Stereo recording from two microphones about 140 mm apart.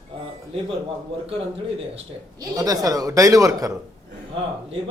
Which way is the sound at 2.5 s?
25° right (ahead or behind).